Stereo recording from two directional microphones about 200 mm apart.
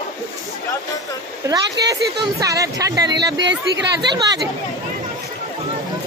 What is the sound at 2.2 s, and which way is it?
Speech, 15° right (ahead or behind).